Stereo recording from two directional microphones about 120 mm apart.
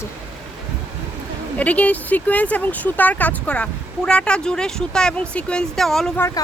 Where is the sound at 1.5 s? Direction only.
10° left (ahead or behind).